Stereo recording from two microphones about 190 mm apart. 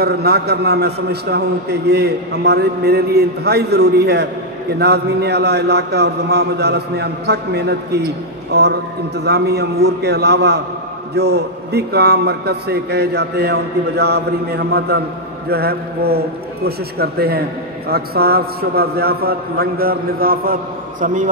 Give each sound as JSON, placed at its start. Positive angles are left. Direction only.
{"t": 0.0, "sound": "a man's voice", "side_deg": -55}